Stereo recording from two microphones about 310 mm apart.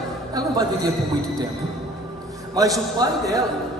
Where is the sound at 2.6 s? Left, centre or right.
Centre.